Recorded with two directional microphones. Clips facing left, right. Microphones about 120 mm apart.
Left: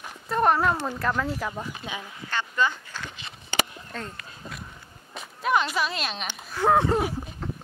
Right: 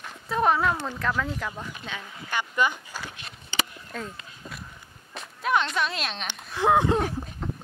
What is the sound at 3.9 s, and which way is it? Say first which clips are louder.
Speech: right 1 dB; 5° right (ahead or behind).